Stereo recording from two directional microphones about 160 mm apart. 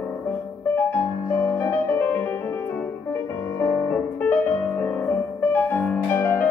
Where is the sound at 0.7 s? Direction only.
15° left (ahead or behind).